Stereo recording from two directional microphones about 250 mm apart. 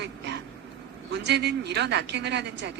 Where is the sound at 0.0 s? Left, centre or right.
Right.